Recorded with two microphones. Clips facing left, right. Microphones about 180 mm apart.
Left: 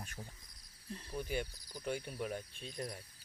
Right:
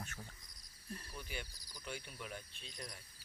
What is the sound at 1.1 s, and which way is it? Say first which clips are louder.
Speech: left 14 dB; 45° left (ahead or behind).